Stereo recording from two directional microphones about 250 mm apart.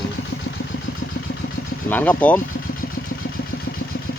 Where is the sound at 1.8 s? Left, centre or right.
Centre.